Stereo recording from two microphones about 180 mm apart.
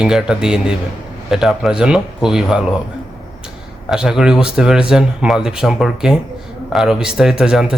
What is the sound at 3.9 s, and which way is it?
Speech, centre (ahead or behind).